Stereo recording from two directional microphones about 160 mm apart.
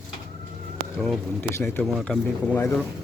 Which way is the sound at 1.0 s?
5° left (ahead or behind).